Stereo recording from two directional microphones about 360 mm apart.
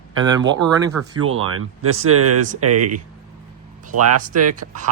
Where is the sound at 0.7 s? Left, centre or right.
Centre.